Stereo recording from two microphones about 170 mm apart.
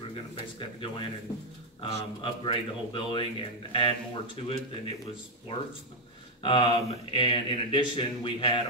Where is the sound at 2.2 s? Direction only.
30° left (ahead or behind).